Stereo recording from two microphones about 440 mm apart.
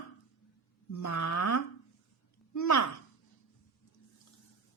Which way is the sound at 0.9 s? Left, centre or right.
Left.